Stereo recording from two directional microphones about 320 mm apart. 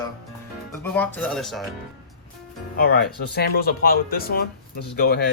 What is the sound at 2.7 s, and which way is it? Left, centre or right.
Speech, left.